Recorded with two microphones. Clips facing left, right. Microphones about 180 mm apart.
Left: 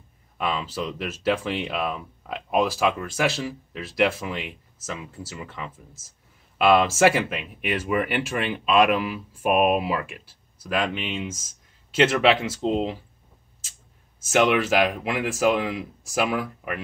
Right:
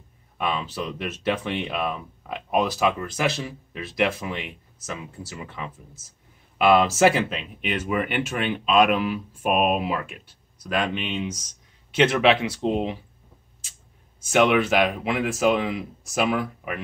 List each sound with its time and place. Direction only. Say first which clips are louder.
0.4 s speech: even; centre (ahead or behind)
14.2 s speech: right 1 dB; centre (ahead or behind)